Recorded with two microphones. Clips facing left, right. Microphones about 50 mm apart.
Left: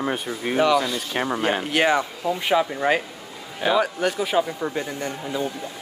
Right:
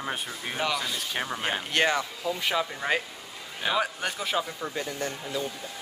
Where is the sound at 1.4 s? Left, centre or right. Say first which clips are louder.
Left 4 dB; centre.